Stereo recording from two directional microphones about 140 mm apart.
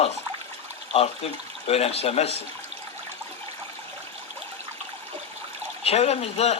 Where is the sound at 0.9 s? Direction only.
45° left (ahead or behind).